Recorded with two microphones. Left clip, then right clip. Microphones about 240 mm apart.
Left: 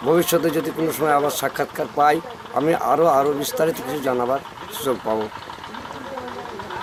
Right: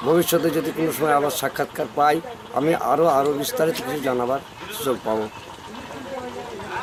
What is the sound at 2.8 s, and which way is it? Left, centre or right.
Speech, centre.